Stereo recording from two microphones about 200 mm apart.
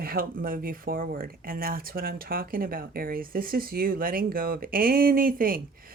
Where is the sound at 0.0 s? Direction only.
45° right (ahead or behind).